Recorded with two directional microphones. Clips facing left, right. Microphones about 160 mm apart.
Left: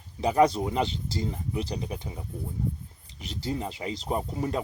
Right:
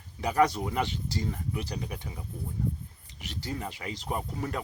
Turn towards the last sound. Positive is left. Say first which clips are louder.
# left 4 dB
turn(degrees=25)  # may be behind; listen again after turning